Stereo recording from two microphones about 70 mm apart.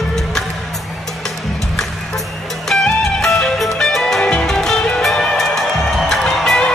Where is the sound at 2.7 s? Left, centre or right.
Centre.